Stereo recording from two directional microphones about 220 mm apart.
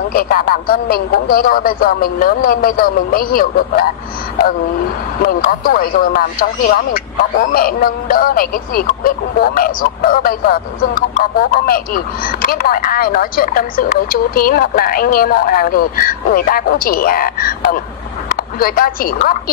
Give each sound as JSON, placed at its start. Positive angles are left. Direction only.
{"t": 0.1, "sound": "speech", "side_deg": 40}
{"t": 5.2, "sound": "a woman's voice", "side_deg": 40}